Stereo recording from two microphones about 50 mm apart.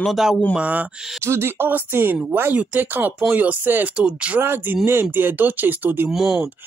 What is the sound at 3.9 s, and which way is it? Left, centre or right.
Speech, right.